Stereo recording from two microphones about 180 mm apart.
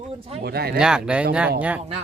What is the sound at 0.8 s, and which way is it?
Speech, 5° right (ahead or behind).